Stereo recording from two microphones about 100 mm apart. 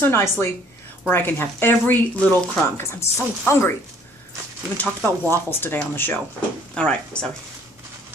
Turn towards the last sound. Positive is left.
turn(degrees=10)  # may be behind; listen again after turning